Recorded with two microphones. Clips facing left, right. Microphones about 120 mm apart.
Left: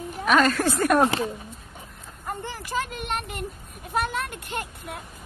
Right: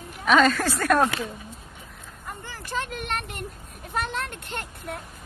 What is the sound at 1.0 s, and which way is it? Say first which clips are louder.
Speech: left 3 dB; 30° left (ahead or behind).